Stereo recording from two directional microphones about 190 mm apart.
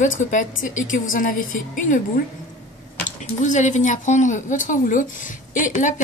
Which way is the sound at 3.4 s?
40° left (ahead or behind).